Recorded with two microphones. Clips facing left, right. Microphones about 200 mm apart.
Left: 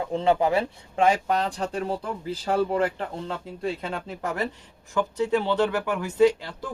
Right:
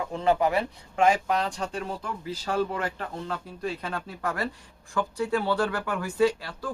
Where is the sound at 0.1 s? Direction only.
25° left (ahead or behind).